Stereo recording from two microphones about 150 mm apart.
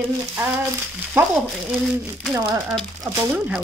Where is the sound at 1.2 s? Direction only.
15° right (ahead or behind).